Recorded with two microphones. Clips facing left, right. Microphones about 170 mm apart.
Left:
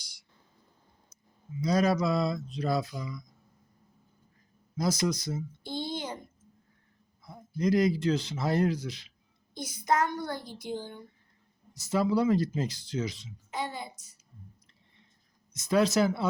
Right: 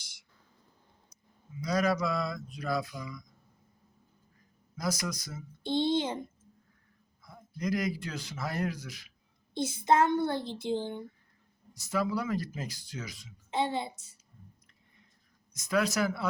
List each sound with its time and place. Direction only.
1.6 s speech: 25° left (ahead or behind)
4.8 s speech: 25° left (ahead or behind)
5.6 s speech: 25° right (ahead or behind)
7.3 s speech: 25° left (ahead or behind)
9.6 s speech: 25° right (ahead or behind)
11.9 s speech: 25° left (ahead or behind)
13.5 s speech: 25° right (ahead or behind)
15.5 s speech: 25° left (ahead or behind)